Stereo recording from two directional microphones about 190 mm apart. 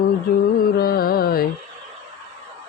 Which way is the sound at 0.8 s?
50° left (ahead or behind).